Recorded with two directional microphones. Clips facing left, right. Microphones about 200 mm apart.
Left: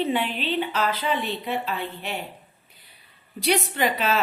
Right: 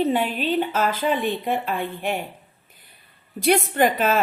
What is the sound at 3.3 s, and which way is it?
Speech, 50° right (ahead or behind).